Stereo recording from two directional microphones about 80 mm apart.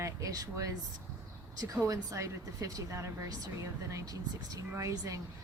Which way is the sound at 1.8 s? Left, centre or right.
Right.